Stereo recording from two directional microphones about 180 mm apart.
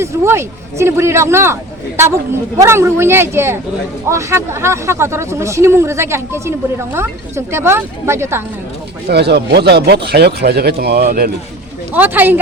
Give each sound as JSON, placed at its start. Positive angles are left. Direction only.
{"t": 0.0, "sound": "speech", "side_deg": -15}
{"t": 9.0, "sound": "speech", "side_deg": -65}
{"t": 11.9, "sound": "speech", "side_deg": -10}